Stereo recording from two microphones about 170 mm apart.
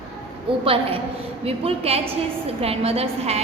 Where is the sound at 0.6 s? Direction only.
35° right (ahead or behind).